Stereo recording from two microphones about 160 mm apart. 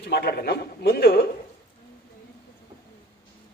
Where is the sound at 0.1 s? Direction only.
80° left.